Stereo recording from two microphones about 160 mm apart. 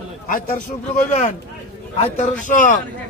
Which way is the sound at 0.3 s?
55° left (ahead or behind).